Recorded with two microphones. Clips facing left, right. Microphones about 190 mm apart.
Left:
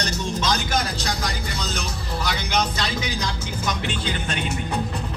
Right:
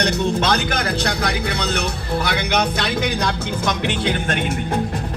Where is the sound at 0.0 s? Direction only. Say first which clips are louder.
Right 7 dB; 60° right (ahead or behind).